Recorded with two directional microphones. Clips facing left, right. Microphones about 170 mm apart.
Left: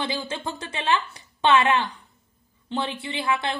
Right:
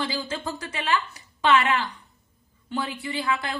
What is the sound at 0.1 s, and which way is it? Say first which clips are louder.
Speech: even; 25° left (ahead or behind).